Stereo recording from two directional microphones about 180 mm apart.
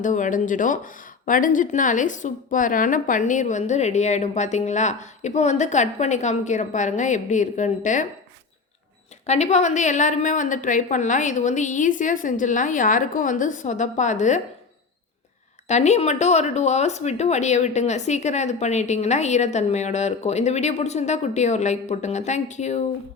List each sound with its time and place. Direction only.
0.0 s a woman's voice: 45° left (ahead or behind)
9.2 s a woman's voice: 40° left (ahead or behind)
15.6 s speech: 40° left (ahead or behind)